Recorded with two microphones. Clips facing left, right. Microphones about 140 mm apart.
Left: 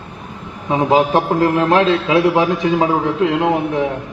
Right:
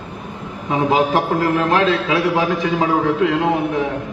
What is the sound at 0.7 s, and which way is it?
A man's voice, 25° left (ahead or behind).